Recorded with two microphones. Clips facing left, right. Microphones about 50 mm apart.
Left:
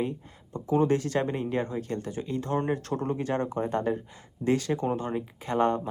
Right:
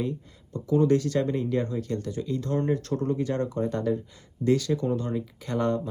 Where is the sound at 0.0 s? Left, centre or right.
Left.